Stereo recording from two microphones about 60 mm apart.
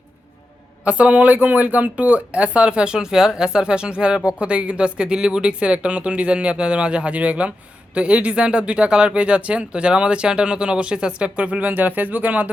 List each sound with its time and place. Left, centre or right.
0.9 s speech: right